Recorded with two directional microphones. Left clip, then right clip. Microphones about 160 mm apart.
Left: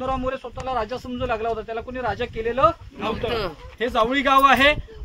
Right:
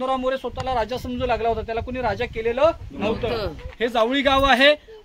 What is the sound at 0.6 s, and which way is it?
Speech, 80° right.